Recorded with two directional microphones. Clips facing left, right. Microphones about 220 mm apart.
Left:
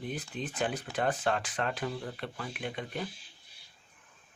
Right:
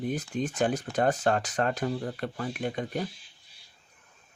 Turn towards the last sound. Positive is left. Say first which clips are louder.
# right 6 dB
turn(degrees=-45)  # may be behind; listen again after turning